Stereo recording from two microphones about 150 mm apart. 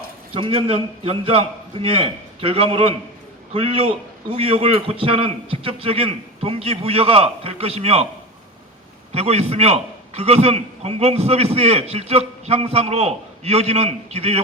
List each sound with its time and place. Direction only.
0.3 s a man's voice: 35° right (ahead or behind)
9.1 s a man's voice: 45° right (ahead or behind)